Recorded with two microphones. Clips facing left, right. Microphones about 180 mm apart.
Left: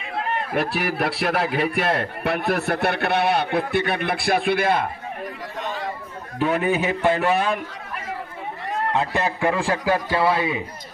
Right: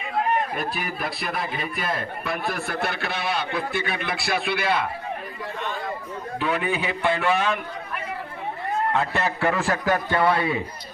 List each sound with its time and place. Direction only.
0.5 s a man's voice: 90° left; by 4.9 s 50° left (ahead or behind)
6.4 s a man's voice: 45° left (ahead or behind)
8.9 s a man's voice: 15° left (ahead or behind)
10.2 s a man's voice: 25° left (ahead or behind)